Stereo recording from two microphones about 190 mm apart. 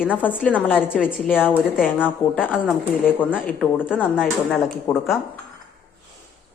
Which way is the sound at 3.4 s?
Centre (ahead or behind).